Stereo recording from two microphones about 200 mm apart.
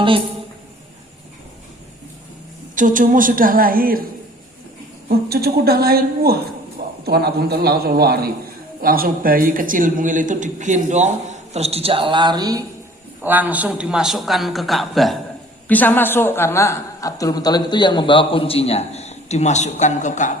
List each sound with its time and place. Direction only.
2.7 s a woman's voice: 40° right (ahead or behind)
5.0 s a woman's voice: 50° right (ahead or behind); by 12.6 s 20° right (ahead or behind)
13.2 s a man's voice: 10° right (ahead or behind); by 20.3 s 40° left (ahead or behind)